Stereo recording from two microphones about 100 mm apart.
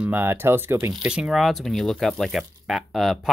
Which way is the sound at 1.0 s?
5° right (ahead or behind).